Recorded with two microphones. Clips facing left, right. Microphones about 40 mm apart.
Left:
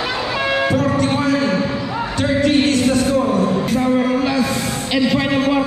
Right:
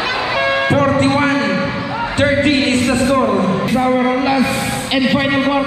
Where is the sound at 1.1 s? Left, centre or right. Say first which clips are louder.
Right 3 dB; right.